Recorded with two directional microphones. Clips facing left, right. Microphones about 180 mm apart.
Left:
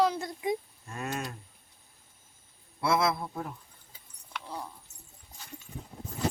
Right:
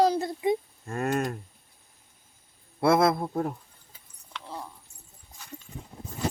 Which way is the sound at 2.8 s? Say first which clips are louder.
Right 6 dB; 55° right (ahead or behind).